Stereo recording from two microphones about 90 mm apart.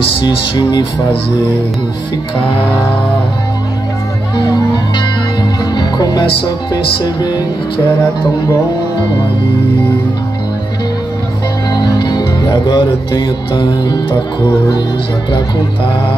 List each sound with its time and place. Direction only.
0.2 s speech: 60° left (ahead or behind)
4.4 s music: 50° left (ahead or behind)
11.7 s music: 55° left (ahead or behind)